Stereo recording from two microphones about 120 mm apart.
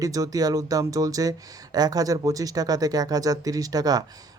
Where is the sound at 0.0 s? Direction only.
30° right (ahead or behind).